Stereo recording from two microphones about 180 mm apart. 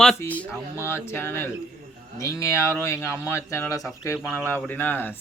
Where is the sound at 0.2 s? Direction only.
10° left (ahead or behind).